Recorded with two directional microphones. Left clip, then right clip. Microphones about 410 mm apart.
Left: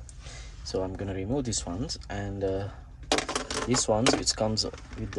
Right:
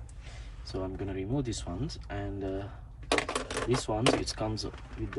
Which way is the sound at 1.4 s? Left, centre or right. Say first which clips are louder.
Left 4 dB; centre.